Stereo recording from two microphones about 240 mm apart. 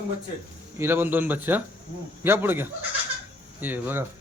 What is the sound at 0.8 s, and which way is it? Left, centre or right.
A man's voice, centre.